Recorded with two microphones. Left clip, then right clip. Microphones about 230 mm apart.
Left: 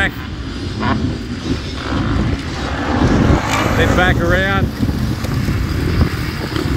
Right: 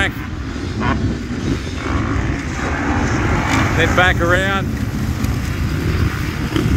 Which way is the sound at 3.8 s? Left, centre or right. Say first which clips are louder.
Right 2 dB; centre.